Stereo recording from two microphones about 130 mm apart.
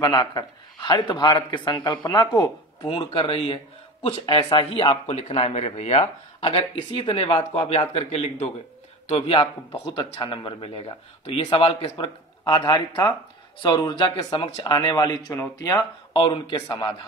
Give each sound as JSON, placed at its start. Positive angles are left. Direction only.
{"t": 0.0, "sound": "a man's voice", "side_deg": 30}
{"t": 2.9, "sound": "speech", "side_deg": 40}
{"t": 5.1, "sound": "speech", "side_deg": 55}
{"t": 12.0, "sound": "a man's voice", "side_deg": 40}